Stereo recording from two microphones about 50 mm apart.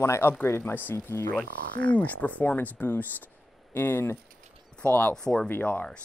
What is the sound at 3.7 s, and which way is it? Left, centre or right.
Speech, left.